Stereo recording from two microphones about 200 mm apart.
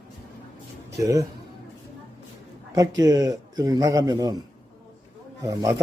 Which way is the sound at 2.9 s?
15° right (ahead or behind).